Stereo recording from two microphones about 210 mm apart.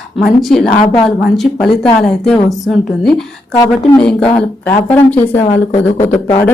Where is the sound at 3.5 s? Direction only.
15° left (ahead or behind).